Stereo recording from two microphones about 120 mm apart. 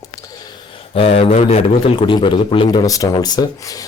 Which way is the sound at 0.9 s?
55° left (ahead or behind).